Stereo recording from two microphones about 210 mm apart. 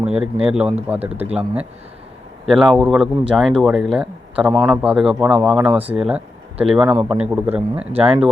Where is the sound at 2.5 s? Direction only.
5° right (ahead or behind).